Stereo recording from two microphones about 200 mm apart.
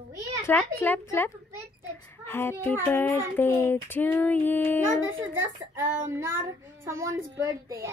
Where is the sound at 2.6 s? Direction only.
10° left (ahead or behind).